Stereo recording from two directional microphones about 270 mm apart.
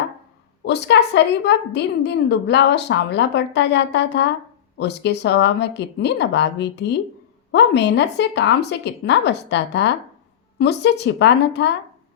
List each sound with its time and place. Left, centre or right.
0.6 s a woman's voice: left